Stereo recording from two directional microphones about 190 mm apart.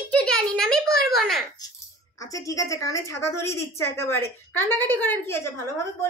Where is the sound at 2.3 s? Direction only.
15° left (ahead or behind).